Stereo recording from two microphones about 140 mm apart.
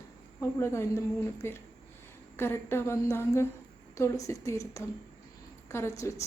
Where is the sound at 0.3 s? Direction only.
20° left (ahead or behind).